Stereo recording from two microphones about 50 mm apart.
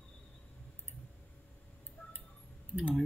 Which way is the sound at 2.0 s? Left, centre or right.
Left.